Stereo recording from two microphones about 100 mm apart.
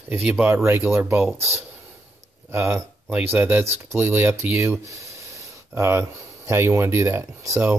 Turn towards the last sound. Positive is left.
turn(degrees=-30)  # may be behind; listen again after turning